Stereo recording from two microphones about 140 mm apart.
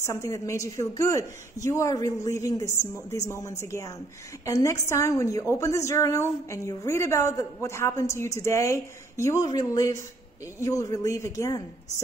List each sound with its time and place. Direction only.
0.0 s a woman's voice: 20° left (ahead or behind)